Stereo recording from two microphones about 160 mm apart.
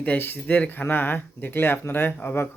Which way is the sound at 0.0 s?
10° left (ahead or behind).